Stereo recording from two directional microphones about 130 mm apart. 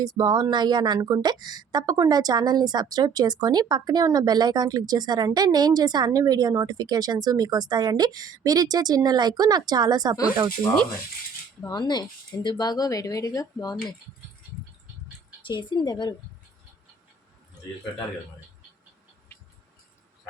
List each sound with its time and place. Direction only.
0.0 s speech: 30° right (ahead or behind)
11.6 s speech: 30° left (ahead or behind)
15.4 s speech: 35° left (ahead or behind)
19.3 s music: 15° left (ahead or behind)